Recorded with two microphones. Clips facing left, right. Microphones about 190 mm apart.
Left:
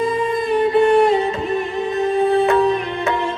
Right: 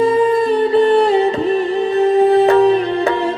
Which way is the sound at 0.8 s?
30° right (ahead or behind).